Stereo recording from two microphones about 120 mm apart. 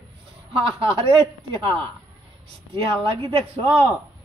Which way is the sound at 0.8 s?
45° right (ahead or behind).